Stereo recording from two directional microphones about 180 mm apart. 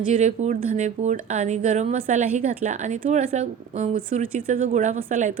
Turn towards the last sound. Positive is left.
turn(degrees=-40)  # may be behind; listen again after turning